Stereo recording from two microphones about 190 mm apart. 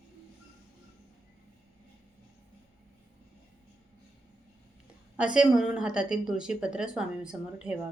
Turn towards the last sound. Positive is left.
turn(degrees=-5)  # may be behind; listen again after turning